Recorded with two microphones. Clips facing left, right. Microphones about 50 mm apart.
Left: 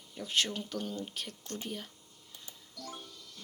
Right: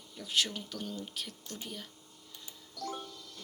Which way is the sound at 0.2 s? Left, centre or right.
Left.